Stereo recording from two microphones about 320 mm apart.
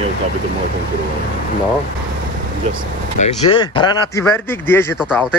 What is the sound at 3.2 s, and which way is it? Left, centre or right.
A man's voice, centre.